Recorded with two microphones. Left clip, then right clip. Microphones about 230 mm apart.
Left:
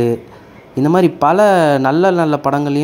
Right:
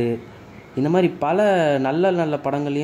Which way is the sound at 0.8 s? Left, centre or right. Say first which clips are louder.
Left 7 dB; centre.